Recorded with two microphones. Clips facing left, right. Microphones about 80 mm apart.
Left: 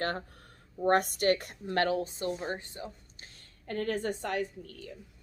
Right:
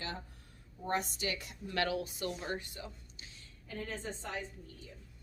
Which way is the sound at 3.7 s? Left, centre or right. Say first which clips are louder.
Left 10 dB; left.